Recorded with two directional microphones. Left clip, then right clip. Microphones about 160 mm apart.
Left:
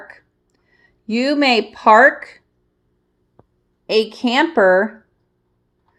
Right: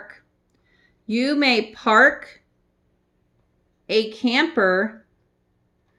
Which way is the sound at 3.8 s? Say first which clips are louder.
Left 4 dB; 20° left (ahead or behind).